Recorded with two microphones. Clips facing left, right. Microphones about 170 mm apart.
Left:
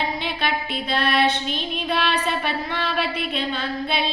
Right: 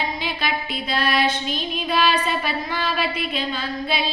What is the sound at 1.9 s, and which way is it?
Music, 60° left (ahead or behind).